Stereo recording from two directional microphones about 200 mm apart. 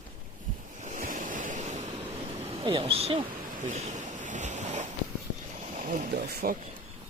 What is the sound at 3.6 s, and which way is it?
Ocean, 35° right (ahead or behind).